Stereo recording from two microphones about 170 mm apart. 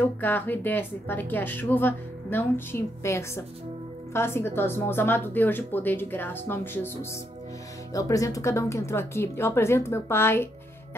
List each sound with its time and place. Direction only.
0.2 s speech: 10° left (ahead or behind)